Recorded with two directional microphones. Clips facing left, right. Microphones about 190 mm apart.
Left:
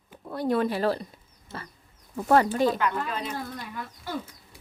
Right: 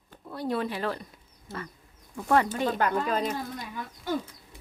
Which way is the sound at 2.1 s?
40° left (ahead or behind).